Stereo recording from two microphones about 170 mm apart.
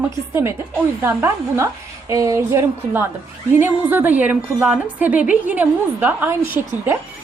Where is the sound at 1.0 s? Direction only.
15° right (ahead or behind).